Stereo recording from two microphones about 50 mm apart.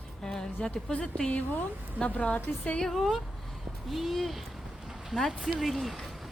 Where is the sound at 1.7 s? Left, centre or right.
Right.